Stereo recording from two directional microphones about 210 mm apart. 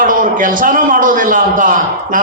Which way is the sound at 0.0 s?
40° right (ahead or behind).